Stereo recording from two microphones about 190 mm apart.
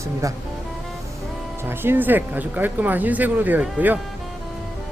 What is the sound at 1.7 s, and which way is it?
Speech, 10° right (ahead or behind).